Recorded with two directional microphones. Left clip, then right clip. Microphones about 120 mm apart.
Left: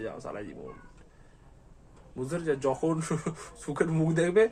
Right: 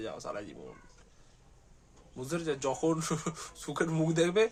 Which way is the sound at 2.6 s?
45° right (ahead or behind).